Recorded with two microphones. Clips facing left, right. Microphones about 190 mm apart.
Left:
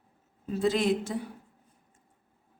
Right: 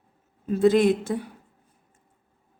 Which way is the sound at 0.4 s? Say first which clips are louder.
Right 7 dB; 55° right (ahead or behind).